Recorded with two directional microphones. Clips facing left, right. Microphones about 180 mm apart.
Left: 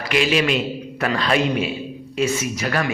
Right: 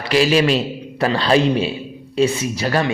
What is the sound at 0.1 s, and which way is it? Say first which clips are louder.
A man's voice: right 4 dB; 35° right (ahead or behind).